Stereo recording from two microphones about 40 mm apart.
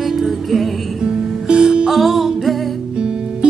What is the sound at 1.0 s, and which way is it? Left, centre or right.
Music, right.